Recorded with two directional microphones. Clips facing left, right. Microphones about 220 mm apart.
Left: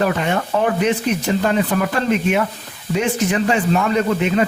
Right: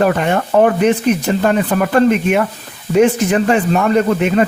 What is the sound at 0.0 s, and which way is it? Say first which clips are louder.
Speech: right 4 dB; 50° right (ahead or behind).